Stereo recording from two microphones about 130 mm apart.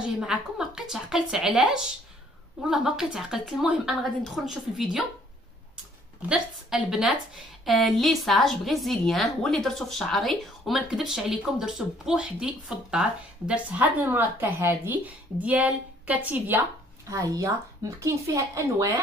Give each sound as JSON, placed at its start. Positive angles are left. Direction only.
{"t": 0.0, "sound": "a woman's voice", "side_deg": -5}
{"t": 6.2, "sound": "a woman's voice", "side_deg": -5}